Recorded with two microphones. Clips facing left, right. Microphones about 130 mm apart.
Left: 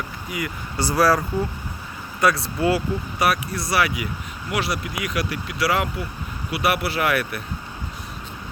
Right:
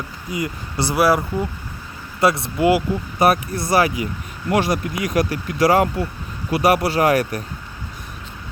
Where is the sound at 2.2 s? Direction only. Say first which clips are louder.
Right 3 dB; 25° right (ahead or behind).